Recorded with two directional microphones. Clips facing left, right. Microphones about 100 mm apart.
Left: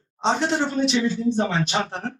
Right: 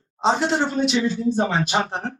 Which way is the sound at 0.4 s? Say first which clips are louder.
Right 1 dB; 35° right (ahead or behind).